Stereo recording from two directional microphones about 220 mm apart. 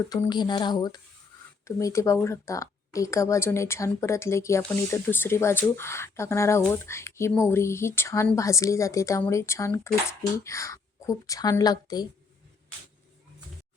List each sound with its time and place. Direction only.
0.1 s speech: 20° left (ahead or behind)